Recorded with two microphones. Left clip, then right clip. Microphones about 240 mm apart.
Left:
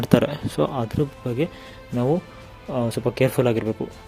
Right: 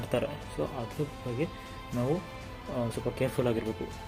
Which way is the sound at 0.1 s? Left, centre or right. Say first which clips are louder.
Left 11 dB; left.